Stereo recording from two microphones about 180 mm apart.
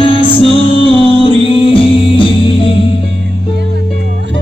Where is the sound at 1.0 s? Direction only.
30° left (ahead or behind).